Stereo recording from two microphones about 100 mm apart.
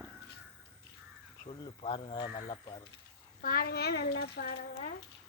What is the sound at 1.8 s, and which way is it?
Speech, 60° left (ahead or behind).